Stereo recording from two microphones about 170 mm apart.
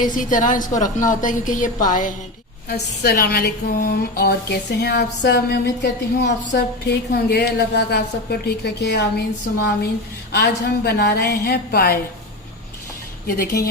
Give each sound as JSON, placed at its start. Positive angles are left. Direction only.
{"t": 0.0, "sound": "a woman's voice", "side_deg": 50}
{"t": 2.6, "sound": "a woman's voice", "side_deg": 70}
{"t": 10.3, "sound": "a woman's voice", "side_deg": 70}
{"t": 13.2, "sound": "speech", "side_deg": 60}